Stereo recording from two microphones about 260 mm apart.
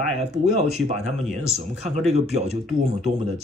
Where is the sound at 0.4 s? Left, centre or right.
Right.